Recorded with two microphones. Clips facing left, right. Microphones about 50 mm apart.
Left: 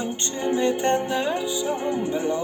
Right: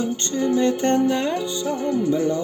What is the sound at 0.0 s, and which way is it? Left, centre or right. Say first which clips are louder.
Music: right 4 dB; left.